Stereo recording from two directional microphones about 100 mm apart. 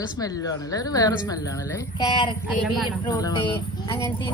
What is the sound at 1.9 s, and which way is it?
Speech, 50° left (ahead or behind).